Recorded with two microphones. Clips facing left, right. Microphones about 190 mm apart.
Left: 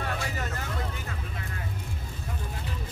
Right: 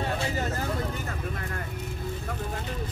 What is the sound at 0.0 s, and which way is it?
Vehicle, 30° right (ahead or behind).